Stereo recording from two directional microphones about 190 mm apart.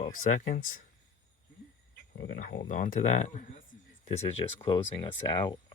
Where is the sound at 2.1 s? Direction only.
60° left (ahead or behind); by 3.5 s 40° left (ahead or behind).